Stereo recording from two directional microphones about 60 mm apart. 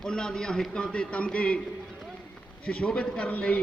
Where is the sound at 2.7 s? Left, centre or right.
Centre.